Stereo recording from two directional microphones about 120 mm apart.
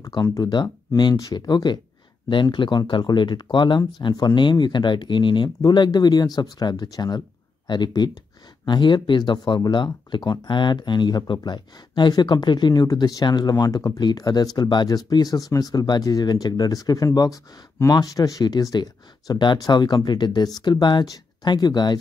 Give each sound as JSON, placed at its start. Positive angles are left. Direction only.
{"t": 0.0, "sound": "speech", "side_deg": 30}